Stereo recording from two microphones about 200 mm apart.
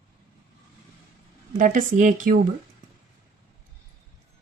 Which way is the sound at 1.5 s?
40° right (ahead or behind).